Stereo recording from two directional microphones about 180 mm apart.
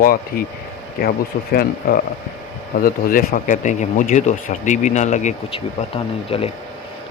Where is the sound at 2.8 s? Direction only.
50° left (ahead or behind).